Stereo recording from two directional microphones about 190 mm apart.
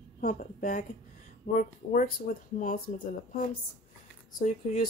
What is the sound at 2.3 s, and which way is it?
Speech, 45° left (ahead or behind).